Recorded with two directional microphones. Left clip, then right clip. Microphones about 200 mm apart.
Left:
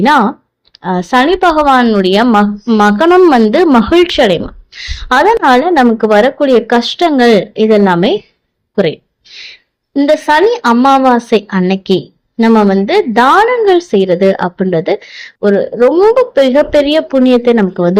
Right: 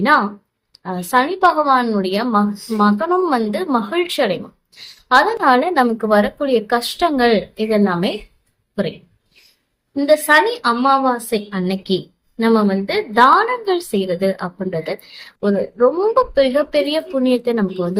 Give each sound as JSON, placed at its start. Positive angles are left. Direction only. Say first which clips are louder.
{"t": 0.0, "sound": "a woman's voice", "louder": "left 6 dB", "side_deg": 35}